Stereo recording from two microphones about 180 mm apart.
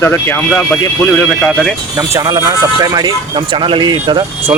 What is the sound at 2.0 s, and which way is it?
Speech, 15° right (ahead or behind).